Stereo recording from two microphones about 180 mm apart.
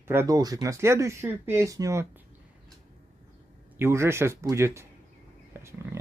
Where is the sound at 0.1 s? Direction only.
15° right (ahead or behind).